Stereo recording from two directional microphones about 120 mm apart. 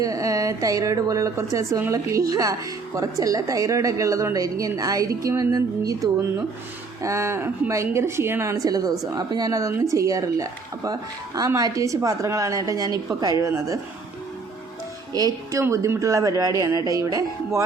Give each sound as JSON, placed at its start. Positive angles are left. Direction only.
{"t": 0.0, "sound": "speech", "side_deg": -30}
{"t": 15.1, "sound": "speech", "side_deg": -30}